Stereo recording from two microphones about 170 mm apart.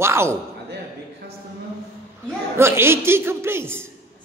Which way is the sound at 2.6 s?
15° right (ahead or behind).